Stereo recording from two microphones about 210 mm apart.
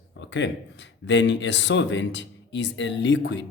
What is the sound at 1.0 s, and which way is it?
A man's voice, 60° left (ahead or behind).